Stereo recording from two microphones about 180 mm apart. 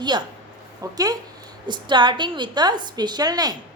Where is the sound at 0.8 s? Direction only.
20° right (ahead or behind).